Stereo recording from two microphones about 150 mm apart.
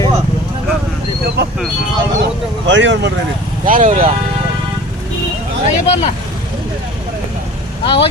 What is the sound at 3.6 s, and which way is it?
Speech, 65° right (ahead or behind).